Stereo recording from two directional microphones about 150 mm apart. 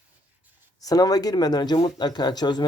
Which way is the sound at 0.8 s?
25° left (ahead or behind).